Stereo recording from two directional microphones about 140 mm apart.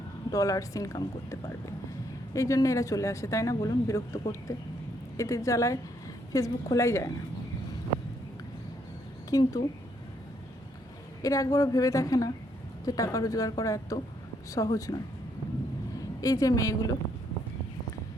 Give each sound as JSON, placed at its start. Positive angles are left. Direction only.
{"t": 0.3, "sound": "speech", "side_deg": 25}
{"t": 9.3, "sound": "speech", "side_deg": 25}
{"t": 11.2, "sound": "speech", "side_deg": 25}